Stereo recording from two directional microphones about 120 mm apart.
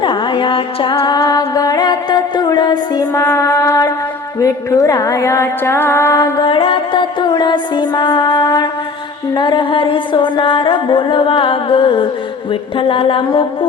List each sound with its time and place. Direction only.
0.0 s music: 40° left (ahead or behind); by 6.1 s 20° left (ahead or behind)
6.4 s music: 45° left (ahead or behind)